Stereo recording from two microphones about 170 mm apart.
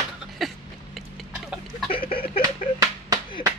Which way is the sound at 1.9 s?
30° left (ahead or behind).